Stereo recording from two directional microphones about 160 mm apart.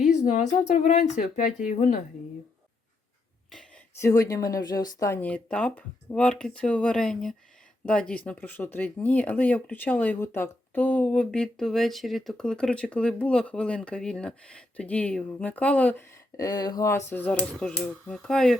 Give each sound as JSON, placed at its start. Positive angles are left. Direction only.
{"t": 0.7, "sound": "speech", "side_deg": 50}
{"t": 4.0, "sound": "speech", "side_deg": 20}
{"t": 16.4, "sound": "speech", "side_deg": 25}
{"t": 17.1, "sound": "speech", "side_deg": 10}